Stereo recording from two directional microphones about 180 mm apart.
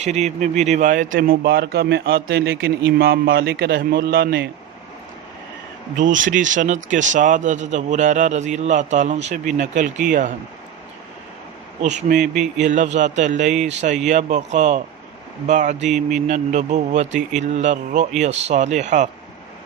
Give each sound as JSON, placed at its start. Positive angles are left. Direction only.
{"t": 0.0, "sound": "speech", "side_deg": -40}
{"t": 6.0, "sound": "speech", "side_deg": -45}
{"t": 11.8, "sound": "speech", "side_deg": -40}
{"t": 12.2, "sound": "speech", "side_deg": 0}
{"t": 12.6, "sound": "speech", "side_deg": -40}
{"t": 15.9, "sound": "speech", "side_deg": 0}
{"t": 16.2, "sound": "speech", "side_deg": -40}